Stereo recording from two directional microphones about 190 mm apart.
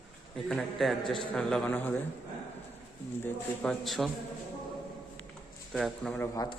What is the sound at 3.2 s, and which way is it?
Speech, 5° left (ahead or behind).